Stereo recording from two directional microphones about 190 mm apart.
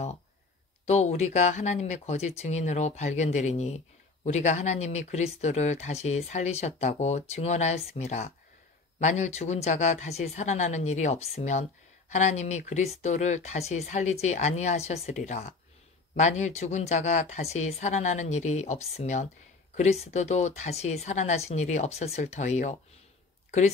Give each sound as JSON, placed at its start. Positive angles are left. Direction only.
{"t": 0.8, "sound": "speech", "side_deg": 35}